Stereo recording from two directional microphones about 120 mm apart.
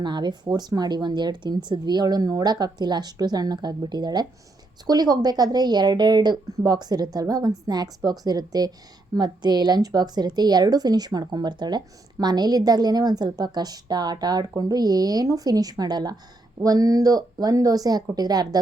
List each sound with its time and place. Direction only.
0.0 s speech: 40° right (ahead or behind)